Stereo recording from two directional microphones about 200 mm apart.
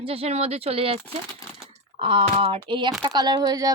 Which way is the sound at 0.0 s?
30° right (ahead or behind).